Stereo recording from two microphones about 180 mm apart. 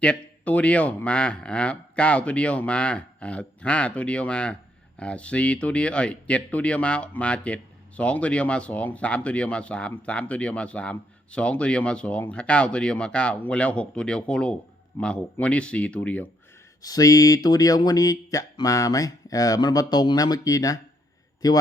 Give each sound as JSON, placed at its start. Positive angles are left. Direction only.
{"t": 0.0, "sound": "speech", "side_deg": 5}
{"t": 16.8, "sound": "speech", "side_deg": 20}